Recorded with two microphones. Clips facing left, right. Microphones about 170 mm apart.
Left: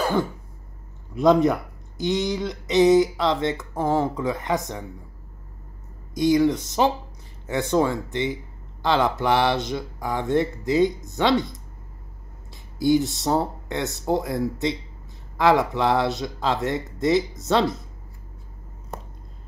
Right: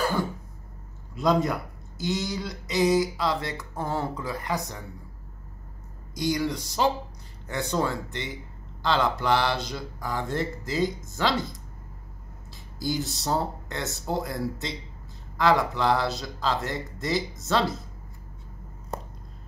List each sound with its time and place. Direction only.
1.1 s speech: 20° left (ahead or behind)
6.1 s speech: 20° left (ahead or behind)
11.2 s speech: centre (ahead or behind)
12.7 s speech: 25° left (ahead or behind)